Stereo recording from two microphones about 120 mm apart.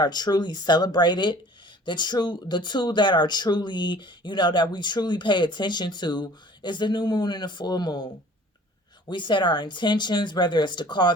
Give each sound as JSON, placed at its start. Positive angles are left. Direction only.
{"t": 0.0, "sound": "speech", "side_deg": 35}
{"t": 9.0, "sound": "speech", "side_deg": 40}